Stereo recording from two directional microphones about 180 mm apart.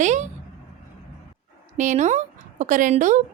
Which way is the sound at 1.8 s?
40° right (ahead or behind).